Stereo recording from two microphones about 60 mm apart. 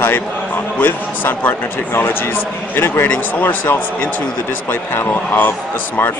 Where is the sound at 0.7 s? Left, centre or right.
Left.